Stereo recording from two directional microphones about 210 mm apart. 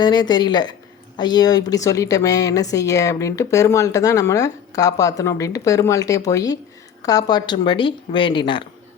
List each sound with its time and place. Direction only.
0.0 s speech: 20° left (ahead or behind)